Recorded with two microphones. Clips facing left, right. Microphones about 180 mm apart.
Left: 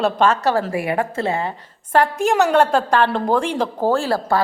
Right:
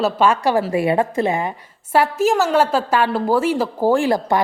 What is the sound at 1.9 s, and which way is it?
A woman's voice, 5° right (ahead or behind).